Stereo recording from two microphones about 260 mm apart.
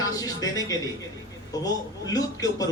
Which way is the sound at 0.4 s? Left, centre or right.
Centre.